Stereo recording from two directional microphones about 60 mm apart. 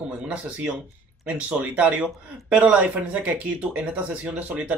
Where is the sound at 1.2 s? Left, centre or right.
Centre.